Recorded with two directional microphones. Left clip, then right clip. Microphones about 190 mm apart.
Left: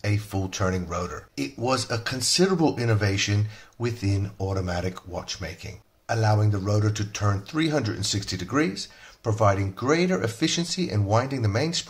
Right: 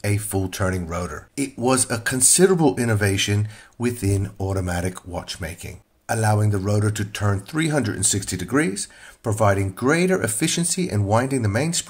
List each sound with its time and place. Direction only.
0.0 s speech: 30° right (ahead or behind)